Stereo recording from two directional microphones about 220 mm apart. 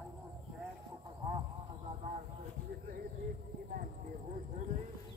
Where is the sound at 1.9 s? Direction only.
30° right (ahead or behind).